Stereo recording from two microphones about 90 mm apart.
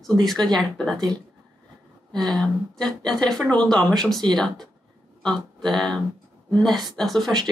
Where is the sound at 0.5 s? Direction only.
5° left (ahead or behind).